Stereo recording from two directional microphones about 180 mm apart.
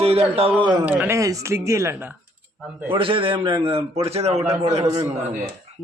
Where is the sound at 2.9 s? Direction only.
30° right (ahead or behind).